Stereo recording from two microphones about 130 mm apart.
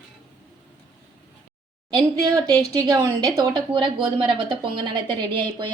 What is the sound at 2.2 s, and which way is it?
A woman's voice, 30° right (ahead or behind).